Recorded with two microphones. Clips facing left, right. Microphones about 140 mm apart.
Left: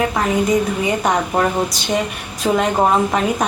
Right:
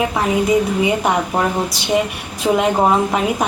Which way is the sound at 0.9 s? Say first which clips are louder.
Right 1 dB; 10° right (ahead or behind).